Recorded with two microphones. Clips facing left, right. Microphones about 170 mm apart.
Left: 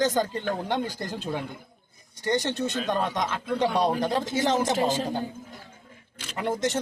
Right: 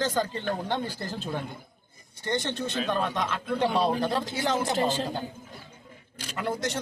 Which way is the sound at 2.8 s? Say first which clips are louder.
Even; 15° left (ahead or behind).